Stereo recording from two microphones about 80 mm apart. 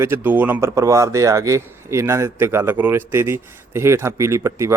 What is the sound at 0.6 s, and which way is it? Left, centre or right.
A man's voice, right.